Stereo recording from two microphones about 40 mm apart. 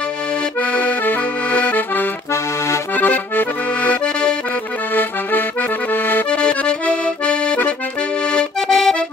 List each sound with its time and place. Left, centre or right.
0.6 s accordion: left
4.0 s accordion: left
6.3 s accordion: left
8.5 s accordion: centre